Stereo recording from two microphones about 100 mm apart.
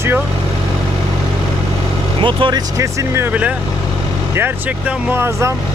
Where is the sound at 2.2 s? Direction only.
50° right (ahead or behind).